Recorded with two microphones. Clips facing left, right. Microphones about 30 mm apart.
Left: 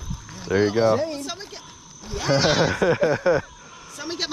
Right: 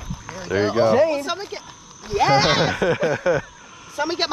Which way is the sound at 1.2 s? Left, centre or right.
Right.